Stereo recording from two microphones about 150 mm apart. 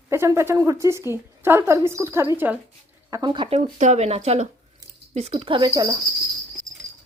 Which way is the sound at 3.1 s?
30° right (ahead or behind).